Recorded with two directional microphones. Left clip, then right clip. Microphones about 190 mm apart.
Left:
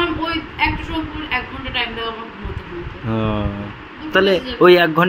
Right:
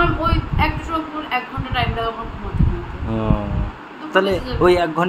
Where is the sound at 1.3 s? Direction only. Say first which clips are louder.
Left 1 dB; 20° right (ahead or behind).